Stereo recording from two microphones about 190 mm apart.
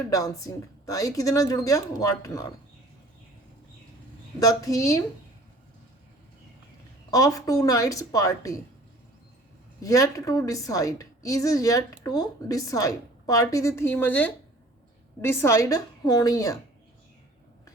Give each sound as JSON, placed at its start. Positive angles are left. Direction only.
{"t": 0.0, "sound": "a woman's voice", "side_deg": 15}
{"t": 4.4, "sound": "a woman's voice", "side_deg": 20}
{"t": 7.1, "sound": "a woman's voice", "side_deg": 20}
{"t": 9.8, "sound": "a woman's voice", "side_deg": 15}